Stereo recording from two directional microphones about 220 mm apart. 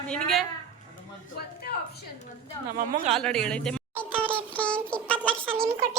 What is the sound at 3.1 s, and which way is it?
Speech, centre (ahead or behind).